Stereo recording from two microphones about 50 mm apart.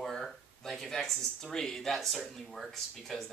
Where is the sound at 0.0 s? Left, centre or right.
Centre.